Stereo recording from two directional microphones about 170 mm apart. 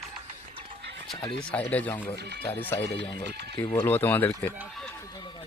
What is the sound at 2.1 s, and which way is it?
Speech, 75° right (ahead or behind).